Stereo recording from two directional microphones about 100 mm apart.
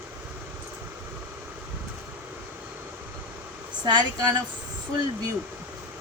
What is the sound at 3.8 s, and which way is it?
Speech, 45° right (ahead or behind).